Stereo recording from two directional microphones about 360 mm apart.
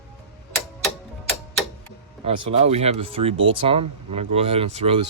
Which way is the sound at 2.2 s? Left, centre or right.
Centre.